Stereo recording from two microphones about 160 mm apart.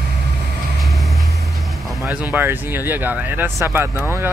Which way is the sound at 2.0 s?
10° right (ahead or behind).